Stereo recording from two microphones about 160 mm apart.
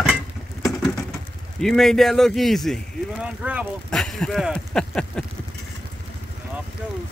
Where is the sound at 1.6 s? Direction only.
Centre (ahead or behind).